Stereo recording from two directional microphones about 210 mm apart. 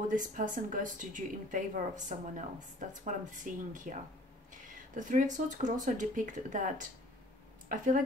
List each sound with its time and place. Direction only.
0.1 s speech: 40° right (ahead or behind)